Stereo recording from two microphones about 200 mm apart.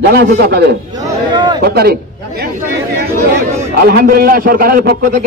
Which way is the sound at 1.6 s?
50° right (ahead or behind).